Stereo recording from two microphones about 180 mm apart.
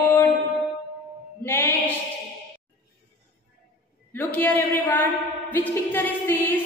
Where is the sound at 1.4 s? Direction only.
10° left (ahead or behind).